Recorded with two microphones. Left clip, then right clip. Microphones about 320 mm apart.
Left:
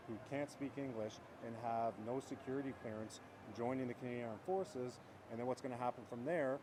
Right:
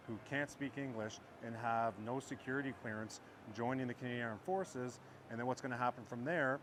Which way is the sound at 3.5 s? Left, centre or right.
Right.